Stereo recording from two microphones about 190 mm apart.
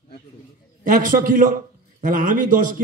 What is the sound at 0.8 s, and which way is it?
A man's voice, 45° right (ahead or behind).